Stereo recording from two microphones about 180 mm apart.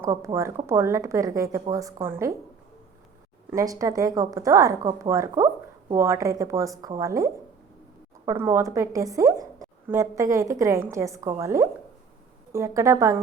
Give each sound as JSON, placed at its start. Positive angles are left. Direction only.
{"t": 0.0, "sound": "a woman's voice", "side_deg": -15}
{"t": 3.5, "sound": "a woman's voice", "side_deg": -20}